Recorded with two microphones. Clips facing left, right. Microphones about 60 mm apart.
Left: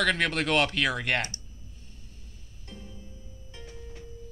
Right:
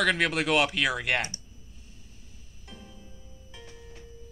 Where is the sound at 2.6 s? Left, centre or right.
Centre.